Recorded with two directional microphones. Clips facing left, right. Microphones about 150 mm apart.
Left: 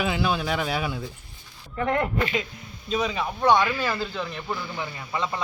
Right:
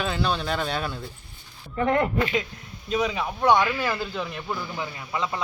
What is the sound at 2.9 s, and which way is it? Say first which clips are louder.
Speech: right 1 dB; 10° right (ahead or behind).